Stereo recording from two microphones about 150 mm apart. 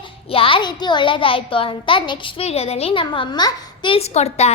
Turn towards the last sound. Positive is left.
turn(degrees=45)  # may be behind; listen again after turning